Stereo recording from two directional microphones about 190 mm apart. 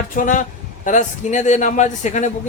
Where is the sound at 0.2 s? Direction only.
40° left (ahead or behind).